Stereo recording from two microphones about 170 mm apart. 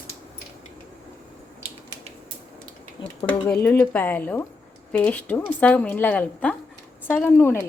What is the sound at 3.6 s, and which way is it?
A woman's voice, 10° left (ahead or behind).